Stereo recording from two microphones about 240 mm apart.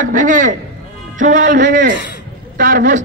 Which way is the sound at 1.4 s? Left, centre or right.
Right.